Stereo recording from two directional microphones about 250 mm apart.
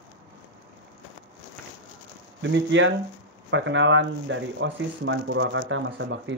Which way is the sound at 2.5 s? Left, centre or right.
Right.